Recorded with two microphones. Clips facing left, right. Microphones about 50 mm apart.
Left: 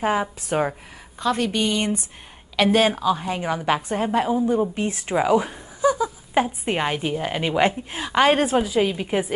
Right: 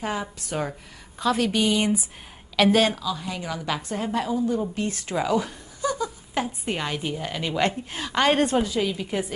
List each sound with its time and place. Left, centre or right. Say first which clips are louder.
0.0 s a woman's voice: left 7 dB; left
1.2 s a woman's voice: even; centre
2.5 s speech: left 1 dB; centre
3.0 s a woman's voice: left 7 dB; left; by 6.4 s centre
6.4 s a woman's voice: left 5 dB; left
7.7 s a woman's voice: left 4 dB; centre
8.8 s a woman's voice: left 4 dB; left